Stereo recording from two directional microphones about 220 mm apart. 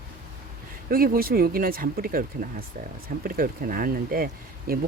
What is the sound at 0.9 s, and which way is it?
Speech, 40° right (ahead or behind).